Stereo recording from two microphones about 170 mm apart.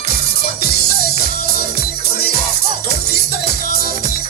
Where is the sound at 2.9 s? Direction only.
70° left (ahead or behind).